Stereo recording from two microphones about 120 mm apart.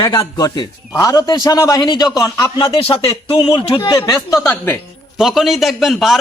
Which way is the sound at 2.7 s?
50° left (ahead or behind).